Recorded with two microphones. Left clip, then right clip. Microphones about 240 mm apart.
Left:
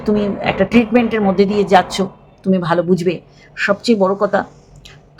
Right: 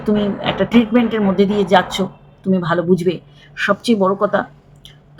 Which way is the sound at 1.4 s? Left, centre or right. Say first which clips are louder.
Left 1 dB; right.